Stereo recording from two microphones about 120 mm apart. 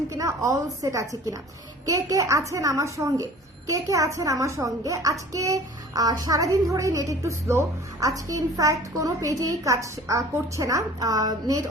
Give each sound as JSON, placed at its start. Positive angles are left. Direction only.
{"t": 0.1, "sound": "a woman's voice", "side_deg": -25}